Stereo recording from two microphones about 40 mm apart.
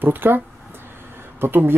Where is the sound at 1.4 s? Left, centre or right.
Right.